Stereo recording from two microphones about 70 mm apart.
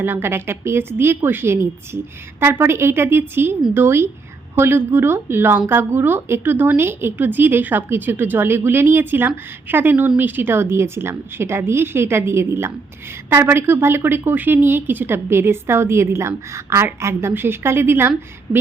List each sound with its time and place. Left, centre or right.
0.0 s speech: right